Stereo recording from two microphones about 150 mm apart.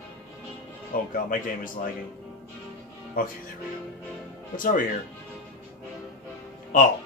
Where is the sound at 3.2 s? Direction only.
65° left (ahead or behind).